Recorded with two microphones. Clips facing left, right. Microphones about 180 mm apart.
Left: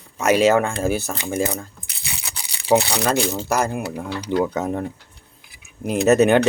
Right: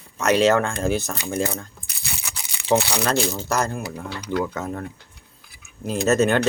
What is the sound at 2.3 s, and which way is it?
Crumpling, 35° left (ahead or behind).